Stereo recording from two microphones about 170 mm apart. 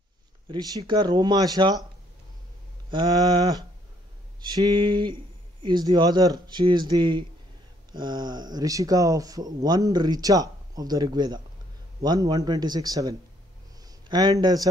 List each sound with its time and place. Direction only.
0.5 s speech: 25° right (ahead or behind)
2.9 s speech: 25° right (ahead or behind)